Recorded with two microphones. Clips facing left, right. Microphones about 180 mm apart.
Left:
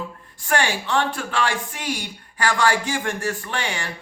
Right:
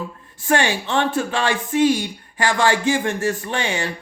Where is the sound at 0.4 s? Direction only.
20° right (ahead or behind).